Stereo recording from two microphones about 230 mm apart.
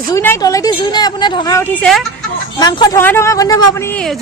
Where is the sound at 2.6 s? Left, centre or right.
Centre.